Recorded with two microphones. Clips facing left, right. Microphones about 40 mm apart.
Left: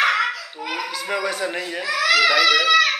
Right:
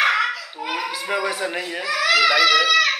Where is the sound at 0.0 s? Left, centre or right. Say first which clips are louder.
Even; centre.